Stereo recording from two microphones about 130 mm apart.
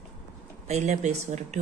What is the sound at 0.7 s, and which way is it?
Speech, 60° right (ahead or behind).